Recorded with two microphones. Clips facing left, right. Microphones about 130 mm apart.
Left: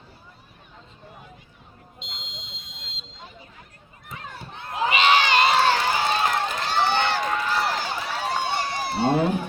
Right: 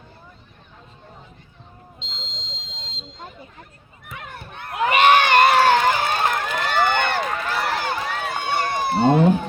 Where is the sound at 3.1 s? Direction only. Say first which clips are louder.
Right 5 dB; 50° right (ahead or behind).